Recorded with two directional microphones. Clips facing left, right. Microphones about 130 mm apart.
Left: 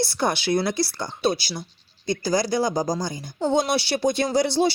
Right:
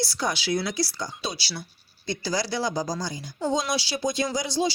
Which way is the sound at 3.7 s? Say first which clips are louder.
Left 5 dB; 60° left (ahead or behind).